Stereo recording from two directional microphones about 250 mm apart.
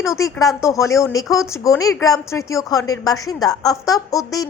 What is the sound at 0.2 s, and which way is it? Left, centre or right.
Speech, centre.